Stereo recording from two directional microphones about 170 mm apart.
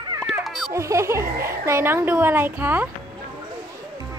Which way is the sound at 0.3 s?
Centre (ahead or behind).